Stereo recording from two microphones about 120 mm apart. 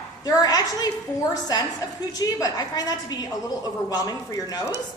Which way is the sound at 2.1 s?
30° left (ahead or behind).